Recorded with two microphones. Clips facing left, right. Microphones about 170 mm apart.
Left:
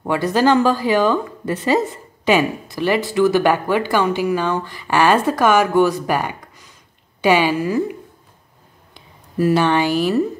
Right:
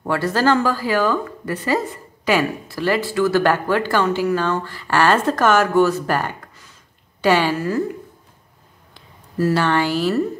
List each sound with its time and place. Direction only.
0.0 s a woman's voice: 15° left (ahead or behind)